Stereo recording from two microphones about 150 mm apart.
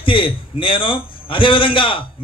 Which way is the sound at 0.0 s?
35° left (ahead or behind).